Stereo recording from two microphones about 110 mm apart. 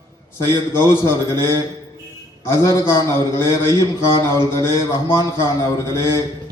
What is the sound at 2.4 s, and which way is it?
A man's voice, 25° left (ahead or behind).